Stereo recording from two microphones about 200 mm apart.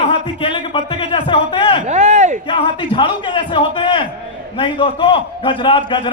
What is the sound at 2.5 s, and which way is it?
A man's voice, 25° left (ahead or behind).